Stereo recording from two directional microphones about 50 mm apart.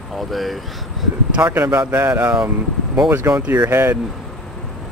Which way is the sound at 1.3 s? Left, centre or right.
Right.